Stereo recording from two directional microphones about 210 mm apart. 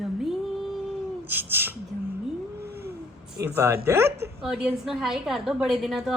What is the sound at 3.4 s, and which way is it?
Speech, 10° right (ahead or behind).